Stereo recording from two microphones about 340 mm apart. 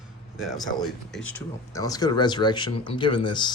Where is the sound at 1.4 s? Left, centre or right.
Centre.